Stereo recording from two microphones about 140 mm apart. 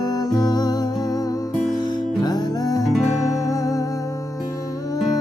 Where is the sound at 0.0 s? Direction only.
25° left (ahead or behind).